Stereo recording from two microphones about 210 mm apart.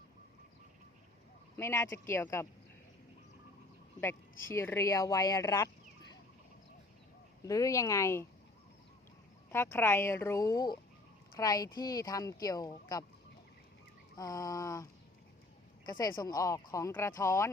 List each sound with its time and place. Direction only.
1.5 s speech: 15° left (ahead or behind)
4.5 s speech: 10° left (ahead or behind)
7.4 s speech: 15° left (ahead or behind)
9.5 s speech: 10° left (ahead or behind)
14.2 s speech: 15° left (ahead or behind)
15.9 s speech: 20° left (ahead or behind)